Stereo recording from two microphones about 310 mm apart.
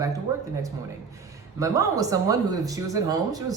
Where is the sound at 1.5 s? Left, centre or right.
Centre.